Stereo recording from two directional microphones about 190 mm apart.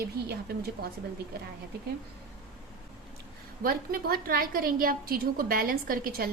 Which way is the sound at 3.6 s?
50° right (ahead or behind).